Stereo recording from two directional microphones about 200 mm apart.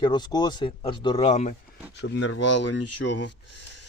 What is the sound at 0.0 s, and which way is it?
Speech, 20° left (ahead or behind).